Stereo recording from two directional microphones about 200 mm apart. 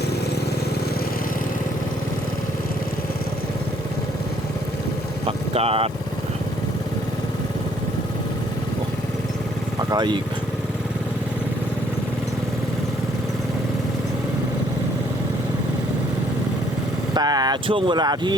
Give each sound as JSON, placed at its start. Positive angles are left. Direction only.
{"t": 5.5, "sound": "speech", "side_deg": -30}
{"t": 9.9, "sound": "speech", "side_deg": -20}
{"t": 17.2, "sound": "speech", "side_deg": -20}